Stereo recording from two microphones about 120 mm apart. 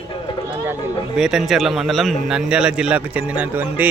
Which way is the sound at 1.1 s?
5° right (ahead or behind).